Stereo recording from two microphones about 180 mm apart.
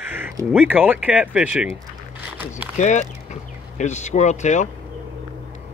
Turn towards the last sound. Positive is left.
turn(degrees=40)  # may be behind; listen again after turning